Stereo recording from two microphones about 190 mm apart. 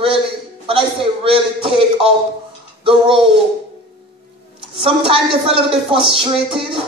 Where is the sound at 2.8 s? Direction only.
30° right (ahead or behind).